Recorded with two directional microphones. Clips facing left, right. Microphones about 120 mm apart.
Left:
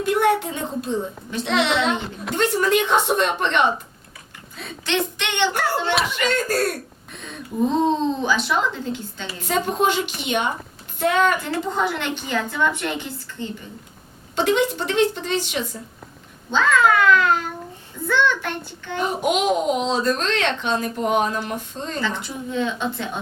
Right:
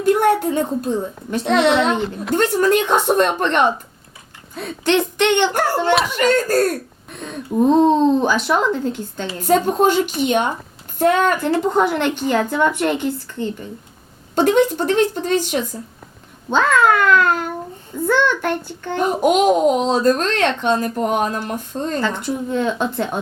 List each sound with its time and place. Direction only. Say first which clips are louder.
0.0 s a child's voice: right 4 dB; 40° right (ahead or behind)
14.3 s a child's voice: right 5 dB; 45° right (ahead or behind)